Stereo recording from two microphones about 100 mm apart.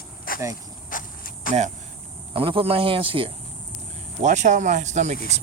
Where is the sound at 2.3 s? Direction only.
65° right (ahead or behind).